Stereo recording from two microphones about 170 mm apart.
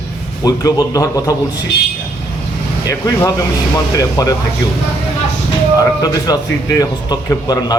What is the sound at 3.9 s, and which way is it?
Speech, 20° left (ahead or behind).